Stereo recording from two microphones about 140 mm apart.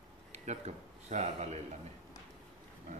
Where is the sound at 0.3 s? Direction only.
55° right (ahead or behind).